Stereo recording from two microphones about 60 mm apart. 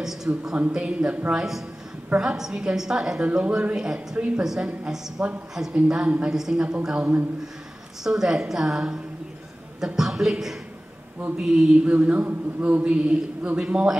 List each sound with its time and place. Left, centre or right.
0.0 s a sound: centre
0.7 s a woman's voice: centre
1.3 s a woman's voice: centre
3.3 s a man's voice: centre
3.7 s a woman's voice: centre
6.3 s a woman's voice: centre
12.0 s a man's voice: right